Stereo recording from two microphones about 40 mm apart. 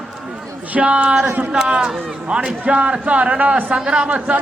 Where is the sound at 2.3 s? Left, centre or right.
Right.